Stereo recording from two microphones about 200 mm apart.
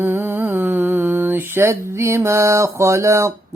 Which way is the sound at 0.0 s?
10° right (ahead or behind).